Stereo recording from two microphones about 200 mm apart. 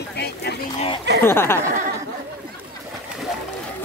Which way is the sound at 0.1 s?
55° left (ahead or behind).